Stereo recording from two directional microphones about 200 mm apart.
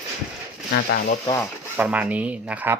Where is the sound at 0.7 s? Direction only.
50° left (ahead or behind).